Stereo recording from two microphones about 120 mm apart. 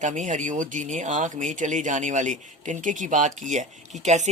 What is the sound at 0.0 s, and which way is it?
Speech, 90° right.